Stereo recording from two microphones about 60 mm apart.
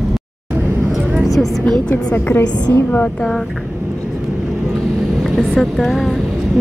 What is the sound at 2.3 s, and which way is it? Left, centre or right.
Speech, left.